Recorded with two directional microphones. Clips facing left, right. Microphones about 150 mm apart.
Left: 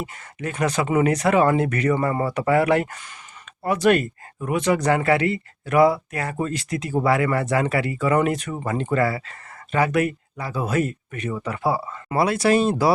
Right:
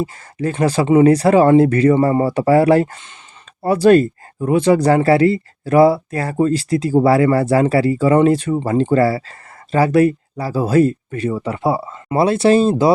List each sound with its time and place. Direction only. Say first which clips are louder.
0.0 s speech: right 9 dB; 35° right (ahead or behind)